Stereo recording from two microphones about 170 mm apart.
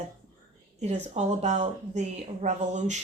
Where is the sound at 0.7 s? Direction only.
40° right (ahead or behind).